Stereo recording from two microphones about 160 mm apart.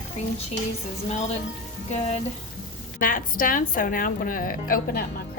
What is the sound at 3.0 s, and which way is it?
A woman's voice, 60° left (ahead or behind).